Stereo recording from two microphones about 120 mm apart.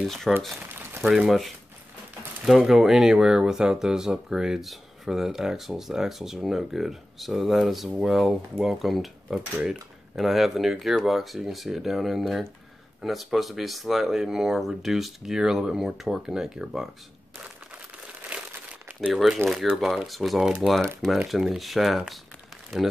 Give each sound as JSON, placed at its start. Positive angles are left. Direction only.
{"t": 0.0, "sound": "speech", "side_deg": 0}
{"t": 0.5, "sound": "a sound", "side_deg": -20}
{"t": 1.0, "sound": "speech", "side_deg": 0}
{"t": 18.3, "sound": "crumpling", "side_deg": -10}
{"t": 19.1, "sound": "speech", "side_deg": 5}